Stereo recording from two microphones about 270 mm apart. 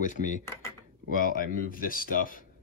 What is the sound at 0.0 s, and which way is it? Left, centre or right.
Speech, left.